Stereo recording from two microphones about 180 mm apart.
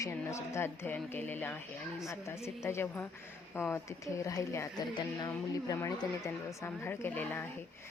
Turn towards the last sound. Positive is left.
turn(degrees=10)  # may be behind; listen again after turning